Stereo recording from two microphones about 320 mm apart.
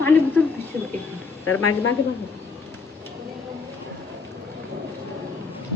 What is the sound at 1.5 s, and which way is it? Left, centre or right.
Speech, left.